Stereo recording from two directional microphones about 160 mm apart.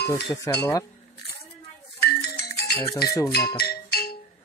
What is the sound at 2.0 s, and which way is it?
Music, 90° left.